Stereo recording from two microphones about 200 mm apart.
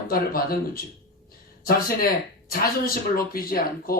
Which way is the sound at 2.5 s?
45° left (ahead or behind).